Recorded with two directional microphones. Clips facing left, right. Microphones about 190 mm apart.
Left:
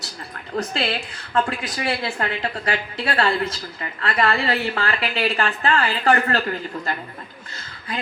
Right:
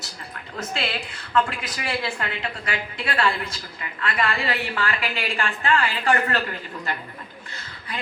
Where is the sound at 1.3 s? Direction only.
35° left (ahead or behind).